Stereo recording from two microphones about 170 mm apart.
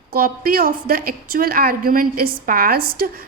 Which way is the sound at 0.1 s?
60° right (ahead or behind).